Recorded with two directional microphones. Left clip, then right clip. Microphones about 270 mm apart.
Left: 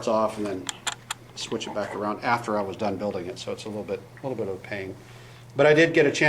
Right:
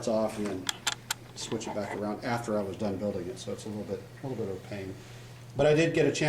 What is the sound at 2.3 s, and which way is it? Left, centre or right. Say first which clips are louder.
Speech: left 7 dB; centre.